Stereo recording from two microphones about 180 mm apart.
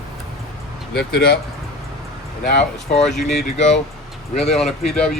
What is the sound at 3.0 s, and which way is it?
Speech, centre (ahead or behind).